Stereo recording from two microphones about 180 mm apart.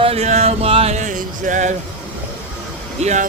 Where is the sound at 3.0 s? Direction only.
40° right (ahead or behind).